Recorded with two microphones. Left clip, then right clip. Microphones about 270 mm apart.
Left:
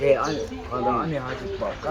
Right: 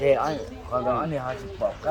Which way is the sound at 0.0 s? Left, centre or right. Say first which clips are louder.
Left 1 dB; centre.